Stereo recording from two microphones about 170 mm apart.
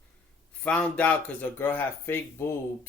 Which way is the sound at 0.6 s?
10° left (ahead or behind).